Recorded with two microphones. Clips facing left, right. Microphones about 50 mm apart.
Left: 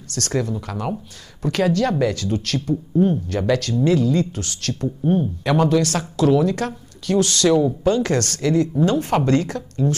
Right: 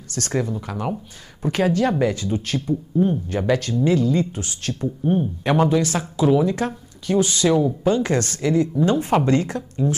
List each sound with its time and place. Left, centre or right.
0.1 s speech: centre
5.4 s speech: right